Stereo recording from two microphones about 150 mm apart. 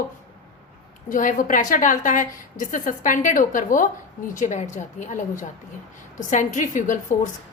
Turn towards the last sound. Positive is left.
turn(degrees=60)  # may be behind; listen again after turning